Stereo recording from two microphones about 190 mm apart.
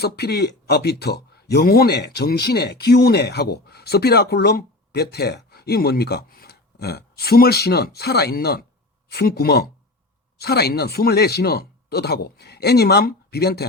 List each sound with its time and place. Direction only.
0.0 s speech: 55° left (ahead or behind)